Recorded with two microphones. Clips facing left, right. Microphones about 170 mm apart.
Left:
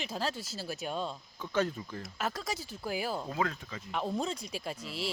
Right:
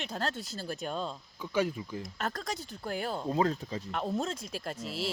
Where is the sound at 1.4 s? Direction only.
10° right (ahead or behind).